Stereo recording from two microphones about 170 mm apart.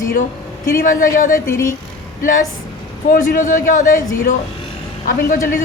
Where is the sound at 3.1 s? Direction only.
50° left (ahead or behind).